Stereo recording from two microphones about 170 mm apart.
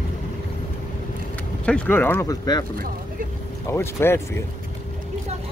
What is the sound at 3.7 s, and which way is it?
Speech, 15° left (ahead or behind).